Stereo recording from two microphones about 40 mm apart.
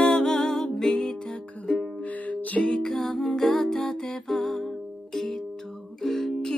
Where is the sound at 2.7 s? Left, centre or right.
Centre.